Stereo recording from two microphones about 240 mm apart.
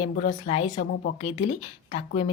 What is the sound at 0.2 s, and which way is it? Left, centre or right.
A woman's voice, left.